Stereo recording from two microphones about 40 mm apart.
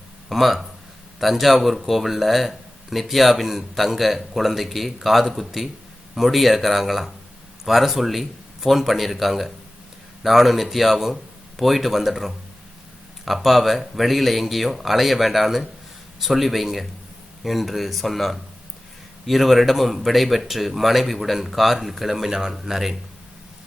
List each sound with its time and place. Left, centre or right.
0.3 s speech: centre